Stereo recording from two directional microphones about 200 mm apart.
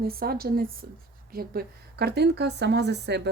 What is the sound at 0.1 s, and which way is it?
Speech, 50° right (ahead or behind).